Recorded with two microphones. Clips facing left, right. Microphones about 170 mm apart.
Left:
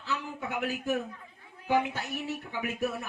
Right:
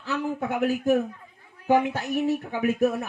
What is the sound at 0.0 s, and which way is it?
A man's voice, 45° right (ahead or behind).